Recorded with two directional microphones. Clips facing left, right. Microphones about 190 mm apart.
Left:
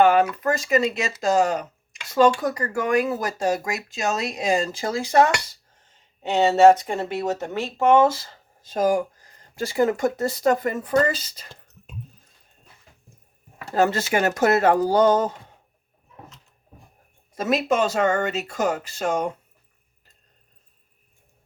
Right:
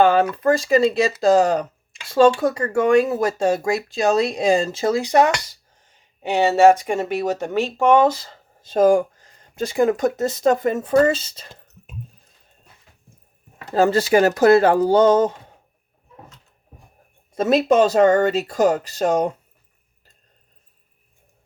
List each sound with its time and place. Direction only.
0.0 s speech: 30° right (ahead or behind)
8.7 s speech: 30° right (ahead or behind)
13.7 s speech: 30° right (ahead or behind)
17.3 s speech: 30° right (ahead or behind)